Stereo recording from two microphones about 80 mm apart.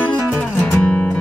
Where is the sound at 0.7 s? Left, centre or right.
Centre.